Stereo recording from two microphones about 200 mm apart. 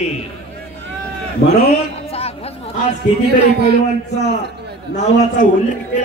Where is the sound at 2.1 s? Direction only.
30° left (ahead or behind).